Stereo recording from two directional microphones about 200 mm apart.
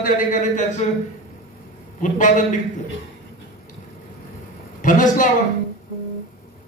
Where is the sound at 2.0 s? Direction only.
40° left (ahead or behind).